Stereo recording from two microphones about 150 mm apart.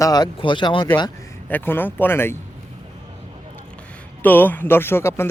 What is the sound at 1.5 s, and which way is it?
Speech, 15° left (ahead or behind).